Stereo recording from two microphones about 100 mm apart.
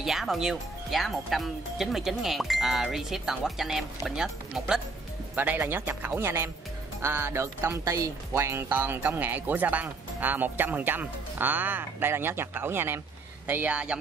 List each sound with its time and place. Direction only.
0.0 s speech: 5° right (ahead or behind)
5.3 s speech: 20° right (ahead or behind)